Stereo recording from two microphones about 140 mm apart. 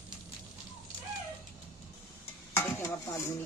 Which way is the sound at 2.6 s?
20° left (ahead or behind).